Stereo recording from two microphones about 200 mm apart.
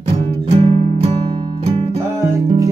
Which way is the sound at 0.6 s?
30° right (ahead or behind).